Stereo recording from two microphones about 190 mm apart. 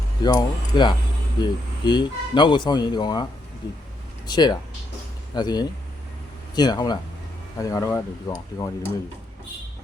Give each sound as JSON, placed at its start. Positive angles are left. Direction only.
{"t": 0.2, "sound": "speech", "side_deg": 20}
{"t": 4.3, "sound": "speech", "side_deg": 20}